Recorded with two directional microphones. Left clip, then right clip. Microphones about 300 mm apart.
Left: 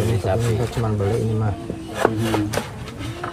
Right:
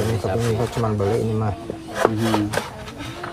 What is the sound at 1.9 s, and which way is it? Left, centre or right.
Cattle, centre.